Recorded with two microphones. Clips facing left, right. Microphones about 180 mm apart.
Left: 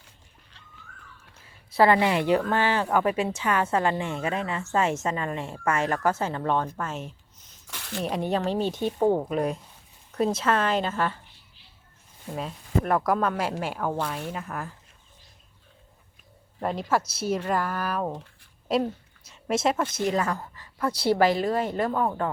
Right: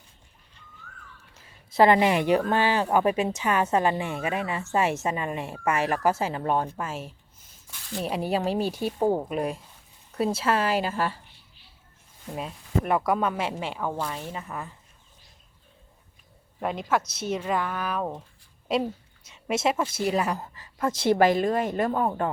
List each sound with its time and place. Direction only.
1.7 s speech: 20° right (ahead or behind)
7.7 s a sound: 70° left (ahead or behind)
8.0 s speech: 5° right (ahead or behind)
12.3 s speech: 5° right (ahead or behind)
16.6 s a woman's voice: centre (ahead or behind); by 22.3 s 20° right (ahead or behind)